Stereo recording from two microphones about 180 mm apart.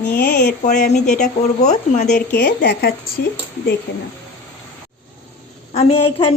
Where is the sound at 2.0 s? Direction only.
65° left (ahead or behind).